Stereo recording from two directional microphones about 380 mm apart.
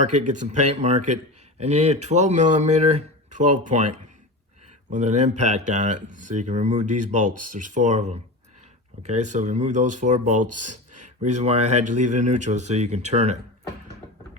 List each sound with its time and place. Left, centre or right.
0.2 s speech: centre
4.9 s speech: centre